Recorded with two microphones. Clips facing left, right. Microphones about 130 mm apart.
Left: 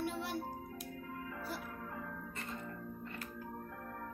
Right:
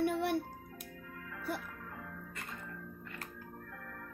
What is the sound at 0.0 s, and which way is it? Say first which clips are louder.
Music: right 7 dB; 60° right (ahead or behind).